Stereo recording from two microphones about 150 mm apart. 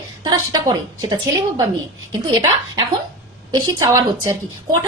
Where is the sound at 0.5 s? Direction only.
25° right (ahead or behind).